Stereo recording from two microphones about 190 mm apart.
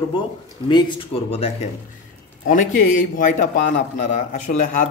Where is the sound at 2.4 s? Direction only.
45° left (ahead or behind).